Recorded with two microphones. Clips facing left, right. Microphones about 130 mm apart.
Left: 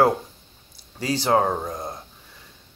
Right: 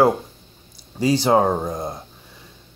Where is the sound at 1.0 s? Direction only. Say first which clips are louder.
Right 4 dB; 15° right (ahead or behind).